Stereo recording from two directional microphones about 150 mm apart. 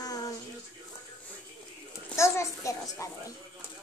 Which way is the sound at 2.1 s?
20° left (ahead or behind).